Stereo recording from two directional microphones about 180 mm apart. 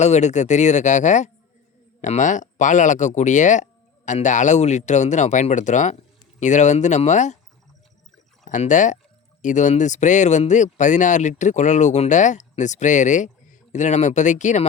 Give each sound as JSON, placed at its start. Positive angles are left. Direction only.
{"t": 0.0, "sound": "speech", "side_deg": 40}
{"t": 8.4, "sound": "speech", "side_deg": 45}